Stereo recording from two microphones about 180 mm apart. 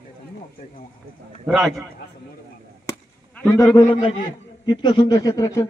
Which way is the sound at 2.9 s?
20° left (ahead or behind).